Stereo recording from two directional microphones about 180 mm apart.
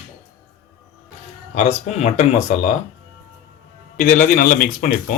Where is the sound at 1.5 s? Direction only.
40° left (ahead or behind).